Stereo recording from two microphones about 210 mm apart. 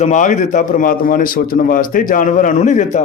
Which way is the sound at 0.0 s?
35° left (ahead or behind).